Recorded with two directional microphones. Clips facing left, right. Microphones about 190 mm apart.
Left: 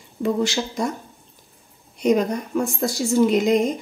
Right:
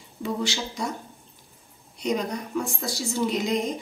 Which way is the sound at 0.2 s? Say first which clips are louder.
Left 7 dB; 45° left (ahead or behind).